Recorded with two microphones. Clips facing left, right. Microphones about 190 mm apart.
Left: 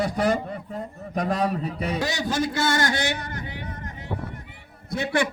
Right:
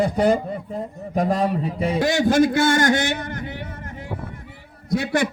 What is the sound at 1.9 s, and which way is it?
A man's voice, 50° right (ahead or behind).